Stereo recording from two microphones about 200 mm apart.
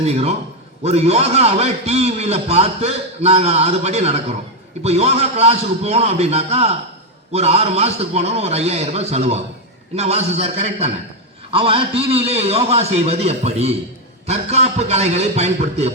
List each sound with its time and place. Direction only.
0.0 s a man's voice: 30° right (ahead or behind)